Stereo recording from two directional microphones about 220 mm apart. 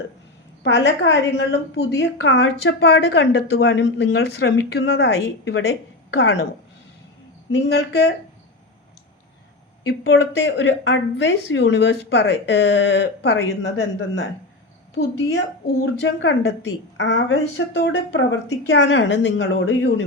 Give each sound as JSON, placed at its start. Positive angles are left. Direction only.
{"t": 0.6, "sound": "a woman's voice", "side_deg": 55}
{"t": 7.7, "sound": "a woman's voice", "side_deg": 50}
{"t": 9.8, "sound": "a woman's voice", "side_deg": 70}
{"t": 10.2, "sound": "a woman's voice", "side_deg": 50}
{"t": 15.3, "sound": "a woman's voice", "side_deg": 50}